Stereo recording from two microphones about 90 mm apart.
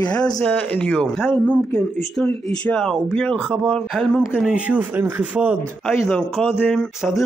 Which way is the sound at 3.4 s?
10° right (ahead or behind).